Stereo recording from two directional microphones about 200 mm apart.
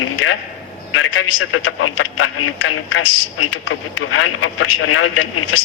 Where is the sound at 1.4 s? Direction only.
90° left.